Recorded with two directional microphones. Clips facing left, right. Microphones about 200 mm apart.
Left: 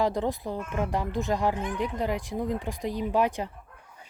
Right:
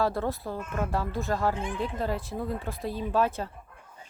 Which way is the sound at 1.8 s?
15° left (ahead or behind).